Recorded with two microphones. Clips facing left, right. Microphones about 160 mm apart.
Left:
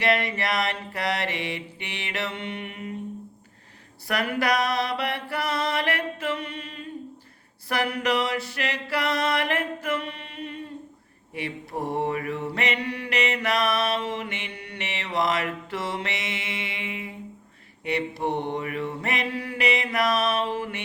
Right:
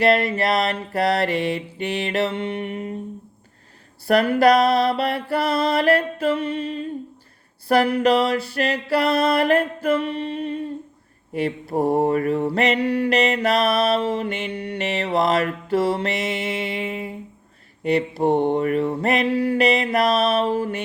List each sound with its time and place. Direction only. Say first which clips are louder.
0.0 s mantra: right 6 dB; 35° right (ahead or behind)
4.0 s mantra: right 10 dB; 30° right (ahead or behind)
7.7 s mantra: right 8 dB; 30° right (ahead or behind)